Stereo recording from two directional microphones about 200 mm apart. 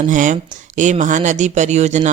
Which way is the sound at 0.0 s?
40° right (ahead or behind).